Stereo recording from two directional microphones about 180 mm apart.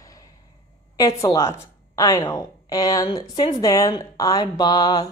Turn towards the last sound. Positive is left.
turn(degrees=20)  # may be behind; listen again after turning